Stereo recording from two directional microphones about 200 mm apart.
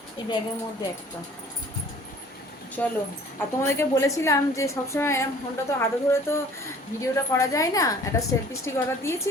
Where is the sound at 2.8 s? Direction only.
10° left (ahead or behind).